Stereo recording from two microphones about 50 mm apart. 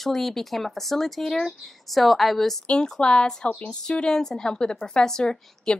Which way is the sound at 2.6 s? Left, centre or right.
Centre.